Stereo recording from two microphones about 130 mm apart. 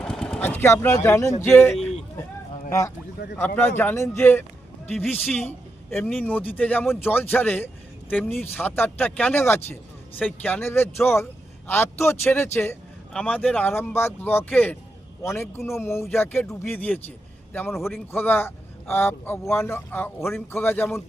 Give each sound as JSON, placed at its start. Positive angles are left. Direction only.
{"t": 0.0, "sound": "a man's voice", "side_deg": 5}